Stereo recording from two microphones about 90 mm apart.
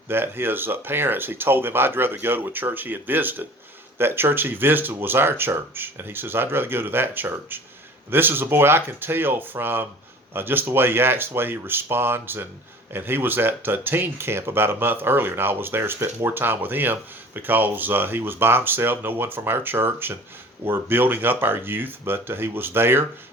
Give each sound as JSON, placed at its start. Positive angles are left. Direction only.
{"t": 0.1, "sound": "speech", "side_deg": -25}